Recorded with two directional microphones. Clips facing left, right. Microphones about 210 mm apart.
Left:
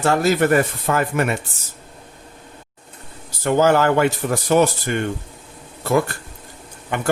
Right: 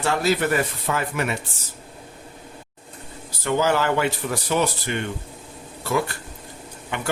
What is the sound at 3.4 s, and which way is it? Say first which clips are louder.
Speech: left 5 dB; 50° left (ahead or behind).